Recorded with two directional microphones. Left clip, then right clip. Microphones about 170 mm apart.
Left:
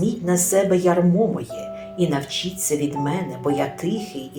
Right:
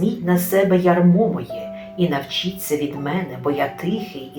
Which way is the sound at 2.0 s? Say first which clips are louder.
Right 2 dB; 45° left (ahead or behind).